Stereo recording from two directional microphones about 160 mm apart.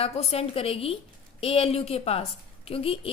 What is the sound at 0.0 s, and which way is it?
A woman's voice, 40° left (ahead or behind).